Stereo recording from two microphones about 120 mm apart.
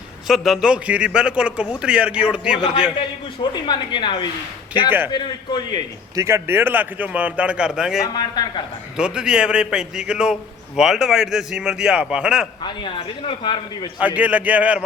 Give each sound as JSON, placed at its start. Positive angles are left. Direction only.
{"t": 0.3, "sound": "a man's voice", "side_deg": 0}
{"t": 3.5, "sound": "speech", "side_deg": 40}
{"t": 4.9, "sound": "a man's voice", "side_deg": -15}
{"t": 5.1, "sound": "speech", "side_deg": 40}
{"t": 6.1, "sound": "a man's voice", "side_deg": -25}
{"t": 8.1, "sound": "speech", "side_deg": 35}
{"t": 9.0, "sound": "a man's voice", "side_deg": -5}
{"t": 12.6, "sound": "speech", "side_deg": 40}
{"t": 14.0, "sound": "a man's voice", "side_deg": -10}